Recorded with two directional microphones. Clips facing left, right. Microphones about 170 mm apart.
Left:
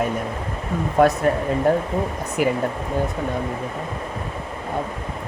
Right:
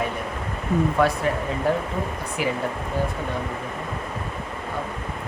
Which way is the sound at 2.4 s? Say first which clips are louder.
Left 5 dB; 50° left (ahead or behind).